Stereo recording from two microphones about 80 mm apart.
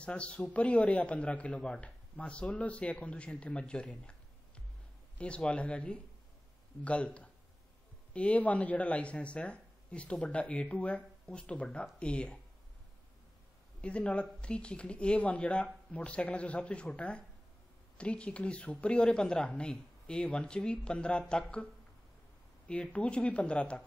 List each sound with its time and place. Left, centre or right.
0.0 s a man's voice: centre
5.2 s a man's voice: centre
13.7 s a man's voice: centre
22.7 s a man's voice: centre